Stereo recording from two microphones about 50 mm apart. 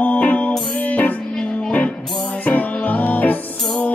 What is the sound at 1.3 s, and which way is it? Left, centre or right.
Music, centre.